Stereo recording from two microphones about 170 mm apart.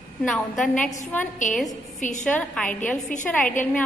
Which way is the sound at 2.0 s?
45° left (ahead or behind).